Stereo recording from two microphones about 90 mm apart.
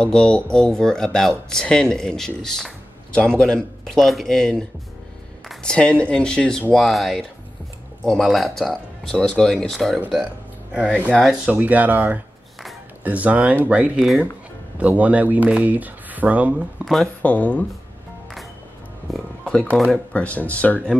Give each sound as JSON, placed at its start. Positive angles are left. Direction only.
{"t": 0.0, "sound": "speech", "side_deg": 10}
{"t": 11.1, "sound": "speech", "side_deg": 5}
{"t": 11.6, "sound": "speech", "side_deg": -15}
{"t": 16.8, "sound": "speech", "side_deg": 0}
{"t": 17.2, "sound": "speech", "side_deg": 15}
{"t": 19.1, "sound": "music", "side_deg": 10}
{"t": 20.1, "sound": "speech", "side_deg": 15}